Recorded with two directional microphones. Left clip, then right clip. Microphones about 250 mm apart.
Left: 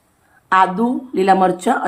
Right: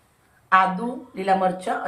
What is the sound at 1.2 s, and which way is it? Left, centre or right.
Speech, left.